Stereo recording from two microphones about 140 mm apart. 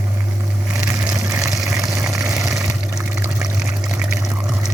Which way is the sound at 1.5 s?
Centre (ahead or behind).